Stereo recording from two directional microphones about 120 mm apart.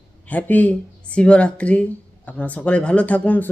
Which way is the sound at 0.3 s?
15° left (ahead or behind).